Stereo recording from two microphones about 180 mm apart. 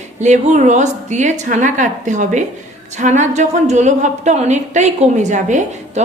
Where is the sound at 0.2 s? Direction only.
40° right (ahead or behind).